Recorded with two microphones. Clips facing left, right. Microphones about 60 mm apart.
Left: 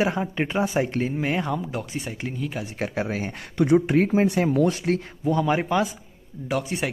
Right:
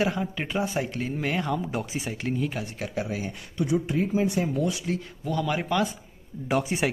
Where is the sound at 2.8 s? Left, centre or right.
Left.